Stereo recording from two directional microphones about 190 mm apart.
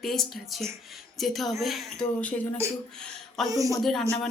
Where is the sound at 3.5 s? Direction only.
15° right (ahead or behind).